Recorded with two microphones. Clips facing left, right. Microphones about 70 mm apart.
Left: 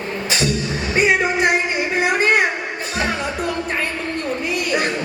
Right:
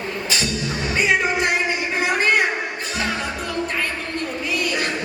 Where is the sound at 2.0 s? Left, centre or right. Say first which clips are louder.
Left 2 dB; left.